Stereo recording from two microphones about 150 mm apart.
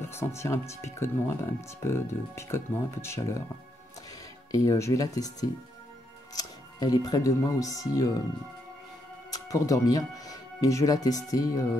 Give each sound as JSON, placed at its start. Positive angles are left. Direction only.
{"t": 0.0, "sound": "speech", "side_deg": 15}
{"t": 4.5, "sound": "speech", "side_deg": 20}
{"t": 9.3, "sound": "speech", "side_deg": 25}